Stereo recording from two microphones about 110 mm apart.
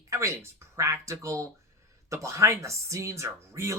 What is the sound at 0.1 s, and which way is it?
Speech, 25° right (ahead or behind).